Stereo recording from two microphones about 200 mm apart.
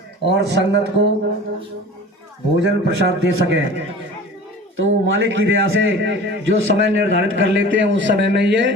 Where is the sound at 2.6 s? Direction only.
60° right (ahead or behind).